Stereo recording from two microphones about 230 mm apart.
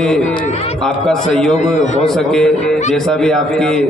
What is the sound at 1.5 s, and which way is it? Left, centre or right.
Speech, left.